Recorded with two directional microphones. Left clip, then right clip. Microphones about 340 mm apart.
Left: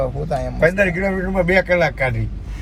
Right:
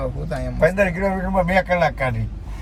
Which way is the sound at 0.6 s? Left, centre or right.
Centre.